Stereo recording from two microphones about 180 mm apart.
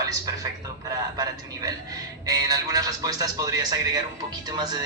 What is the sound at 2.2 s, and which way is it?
A man's voice, 20° right (ahead or behind).